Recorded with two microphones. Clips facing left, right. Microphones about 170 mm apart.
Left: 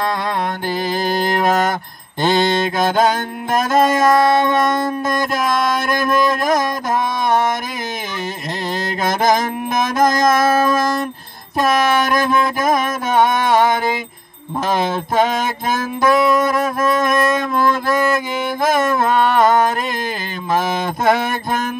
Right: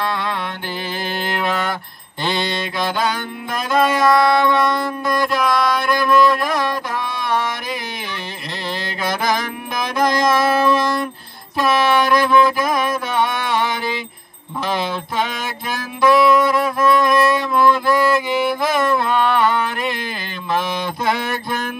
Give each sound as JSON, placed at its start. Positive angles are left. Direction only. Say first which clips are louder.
{"t": 0.0, "sound": "mantra", "louder": "left 3 dB", "side_deg": 40}
{"t": 2.2, "sound": "music", "louder": "left 7 dB", "side_deg": 45}
{"t": 9.0, "sound": "music", "louder": "left 4 dB", "side_deg": 45}
{"t": 11.5, "sound": "mantra", "louder": "left 1 dB", "side_deg": 45}
{"t": 14.7, "sound": "music", "louder": "left 4 dB", "side_deg": 45}
{"t": 20.5, "sound": "mantra", "louder": "left 3 dB", "side_deg": 45}